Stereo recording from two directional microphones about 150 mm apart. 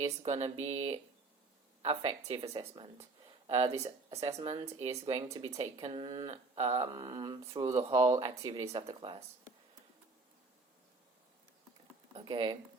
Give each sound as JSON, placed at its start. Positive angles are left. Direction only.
{"t": 0.2, "sound": "speech", "side_deg": -45}
{"t": 6.2, "sound": "speech", "side_deg": -45}
{"t": 6.8, "sound": "speech", "side_deg": -25}
{"t": 8.9, "sound": "speech", "side_deg": -35}
{"t": 12.1, "sound": "speech", "side_deg": -35}